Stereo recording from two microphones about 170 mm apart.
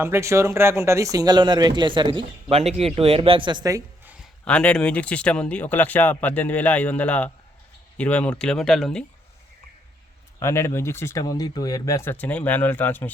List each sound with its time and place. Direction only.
0.0 s speech: 15° right (ahead or behind)
4.4 s speech: 5° left (ahead or behind)
10.4 s speech: 15° left (ahead or behind)